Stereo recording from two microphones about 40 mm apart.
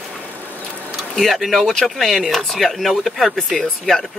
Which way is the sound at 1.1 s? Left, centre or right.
Centre.